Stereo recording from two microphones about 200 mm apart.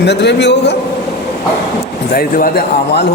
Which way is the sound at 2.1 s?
45° left (ahead or behind).